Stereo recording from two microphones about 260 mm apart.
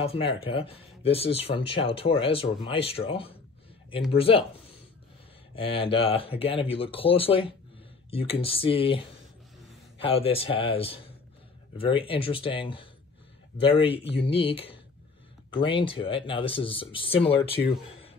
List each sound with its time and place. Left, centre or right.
0.0 s speech: left
5.5 s speech: left